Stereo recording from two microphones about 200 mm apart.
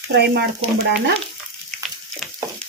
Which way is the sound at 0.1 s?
55° right (ahead or behind).